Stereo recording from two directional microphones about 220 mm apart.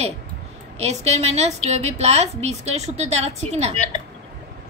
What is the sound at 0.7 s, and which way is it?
A woman's voice, 30° right (ahead or behind).